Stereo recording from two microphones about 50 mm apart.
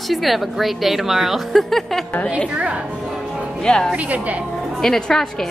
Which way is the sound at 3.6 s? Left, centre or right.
Centre.